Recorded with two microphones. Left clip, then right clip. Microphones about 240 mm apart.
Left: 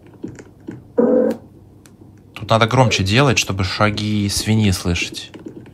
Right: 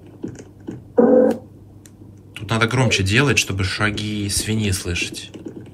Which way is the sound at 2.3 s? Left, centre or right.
Centre.